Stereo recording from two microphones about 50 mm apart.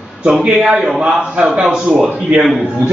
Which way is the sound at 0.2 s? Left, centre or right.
Right.